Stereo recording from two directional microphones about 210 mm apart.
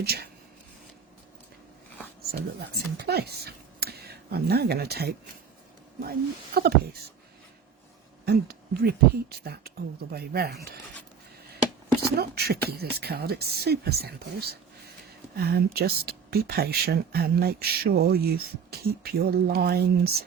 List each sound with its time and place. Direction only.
0.0 s speech: 50° right (ahead or behind)
2.3 s speech: 50° right (ahead or behind)
8.2 s speech: 45° right (ahead or behind)
12.1 s speech: 50° right (ahead or behind)